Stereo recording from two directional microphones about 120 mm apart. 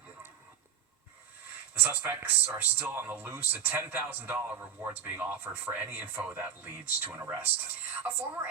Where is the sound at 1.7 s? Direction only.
15° right (ahead or behind).